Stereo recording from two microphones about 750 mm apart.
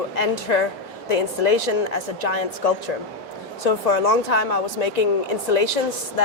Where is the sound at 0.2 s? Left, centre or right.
Left.